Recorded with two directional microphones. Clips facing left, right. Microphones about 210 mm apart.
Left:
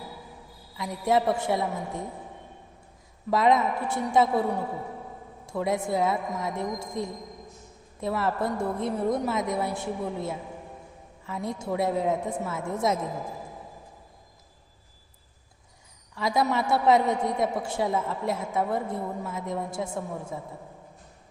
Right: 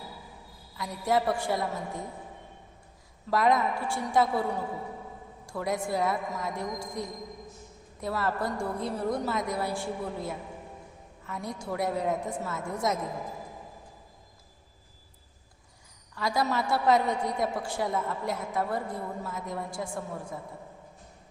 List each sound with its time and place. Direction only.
0.8 s a woman's voice: 20° left (ahead or behind)
3.2 s a woman's voice: 25° left (ahead or behind)
5.5 s a woman's voice: 25° left (ahead or behind)
16.1 s a woman's voice: 25° left (ahead or behind)